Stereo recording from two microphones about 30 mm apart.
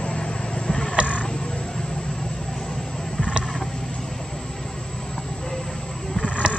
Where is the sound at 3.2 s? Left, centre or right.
Right.